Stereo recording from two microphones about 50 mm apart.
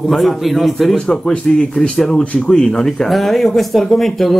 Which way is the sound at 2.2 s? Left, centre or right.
Left.